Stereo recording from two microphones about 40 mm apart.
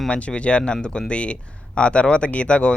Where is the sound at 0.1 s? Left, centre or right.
Left.